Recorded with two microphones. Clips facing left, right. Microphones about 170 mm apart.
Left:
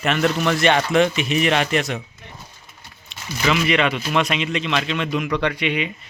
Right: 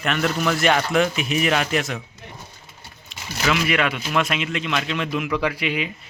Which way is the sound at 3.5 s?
5° right (ahead or behind).